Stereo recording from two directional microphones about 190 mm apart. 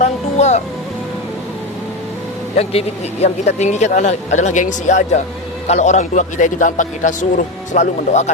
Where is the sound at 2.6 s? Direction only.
35° left (ahead or behind).